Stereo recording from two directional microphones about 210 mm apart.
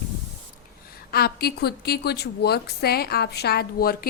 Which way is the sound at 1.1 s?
45° left (ahead or behind).